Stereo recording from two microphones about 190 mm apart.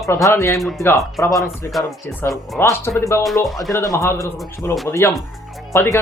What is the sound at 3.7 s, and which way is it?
Speech, 15° left (ahead or behind).